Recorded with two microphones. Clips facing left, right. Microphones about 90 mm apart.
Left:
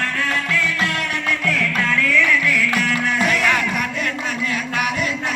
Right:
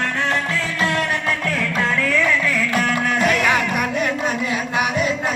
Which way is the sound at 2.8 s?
45° right (ahead or behind).